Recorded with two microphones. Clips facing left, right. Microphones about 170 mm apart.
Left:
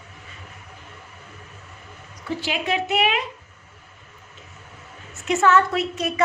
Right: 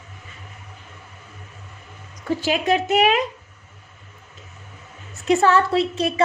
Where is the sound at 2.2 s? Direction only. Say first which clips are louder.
Right 5 dB; 45° right (ahead or behind).